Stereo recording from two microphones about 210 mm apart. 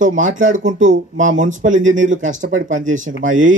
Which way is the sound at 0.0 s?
35° right (ahead or behind).